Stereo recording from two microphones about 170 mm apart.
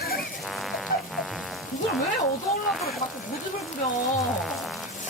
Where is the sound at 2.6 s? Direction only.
Centre (ahead or behind).